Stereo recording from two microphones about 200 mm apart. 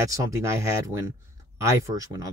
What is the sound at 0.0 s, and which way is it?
Speech, 15° right (ahead or behind).